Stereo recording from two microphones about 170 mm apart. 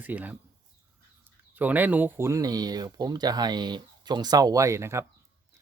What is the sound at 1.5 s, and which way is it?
Speech, 10° right (ahead or behind).